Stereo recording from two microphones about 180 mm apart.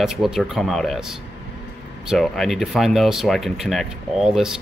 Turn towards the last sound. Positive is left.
turn(degrees=0)  # may be behind; listen again after turning